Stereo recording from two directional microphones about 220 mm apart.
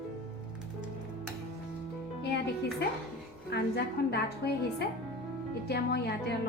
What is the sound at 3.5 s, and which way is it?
A woman's voice, 45° left (ahead or behind).